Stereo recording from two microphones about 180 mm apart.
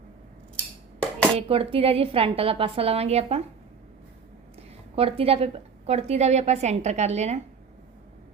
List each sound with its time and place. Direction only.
1.4 s a woman's voice: 30° right (ahead or behind)
4.9 s a woman's voice: 30° right (ahead or behind)